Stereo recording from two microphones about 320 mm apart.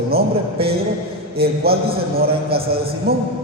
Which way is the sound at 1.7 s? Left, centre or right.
Right.